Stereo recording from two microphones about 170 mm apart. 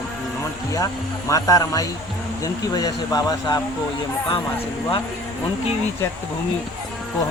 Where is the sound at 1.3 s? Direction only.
20° left (ahead or behind).